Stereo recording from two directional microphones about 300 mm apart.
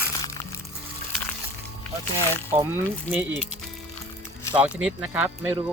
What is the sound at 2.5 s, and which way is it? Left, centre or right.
Speech, centre.